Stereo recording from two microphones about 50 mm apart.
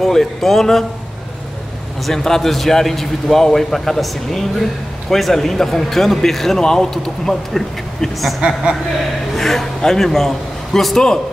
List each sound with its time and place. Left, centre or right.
0.0 s a man's voice: centre
2.0 s a man's voice: centre
8.4 s a woman's voice: centre
9.4 s a man's voice: centre